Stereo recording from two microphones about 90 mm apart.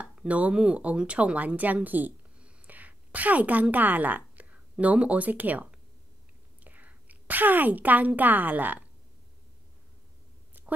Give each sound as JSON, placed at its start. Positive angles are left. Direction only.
{"t": 0.0, "sound": "speech", "side_deg": -10}